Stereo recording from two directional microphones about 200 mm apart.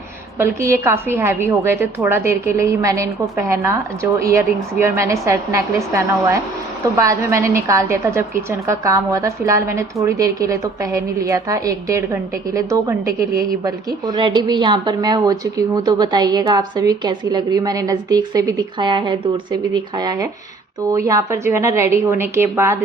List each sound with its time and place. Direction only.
0.3 s a woman's voice: 15° right (ahead or behind)